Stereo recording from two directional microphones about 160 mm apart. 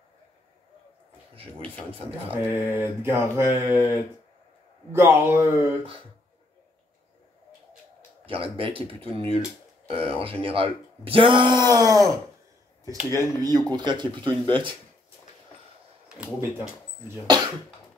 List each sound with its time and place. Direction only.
1.9 s speech: 35° right (ahead or behind)
2.3 s mantra: 15° right (ahead or behind)
8.3 s speech: 35° right (ahead or behind)
13.1 s speech: 25° right (ahead or behind)